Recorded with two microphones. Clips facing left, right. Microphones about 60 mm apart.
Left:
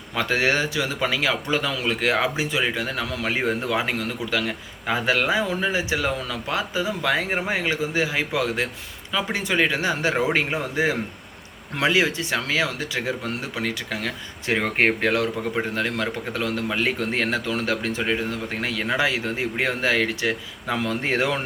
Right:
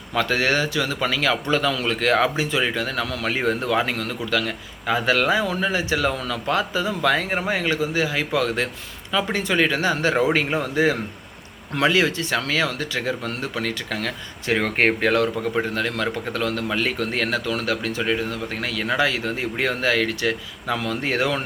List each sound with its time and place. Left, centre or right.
0.1 s a man's voice: centre